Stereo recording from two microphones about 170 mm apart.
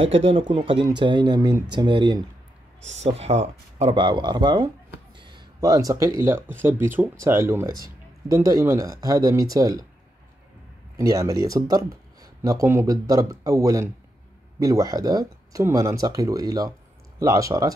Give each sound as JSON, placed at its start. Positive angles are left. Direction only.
{"t": 0.0, "sound": "speech", "side_deg": -35}
{"t": 2.8, "sound": "speech", "side_deg": -40}
{"t": 3.9, "sound": "speech", "side_deg": -25}
{"t": 11.0, "sound": "speech", "side_deg": -20}